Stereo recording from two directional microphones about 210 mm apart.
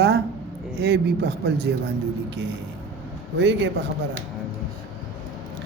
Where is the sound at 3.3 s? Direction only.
60° right (ahead or behind).